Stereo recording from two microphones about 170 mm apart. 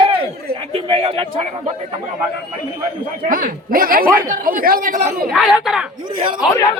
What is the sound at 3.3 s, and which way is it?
Speech, 55° right (ahead or behind).